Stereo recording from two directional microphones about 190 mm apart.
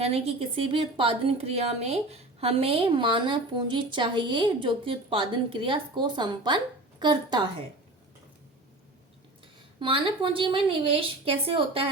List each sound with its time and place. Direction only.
0.0 s a woman's voice: 30° right (ahead or behind)
9.8 s a woman's voice: 25° right (ahead or behind)